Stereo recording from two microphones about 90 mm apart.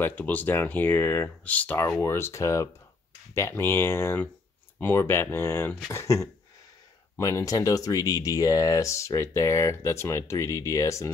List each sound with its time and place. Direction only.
0.0 s speech: 20° left (ahead or behind)
1.8 s speech: 30° left (ahead or behind)